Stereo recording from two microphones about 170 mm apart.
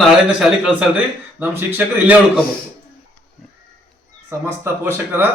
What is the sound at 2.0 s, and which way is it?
Speech, 10° right (ahead or behind).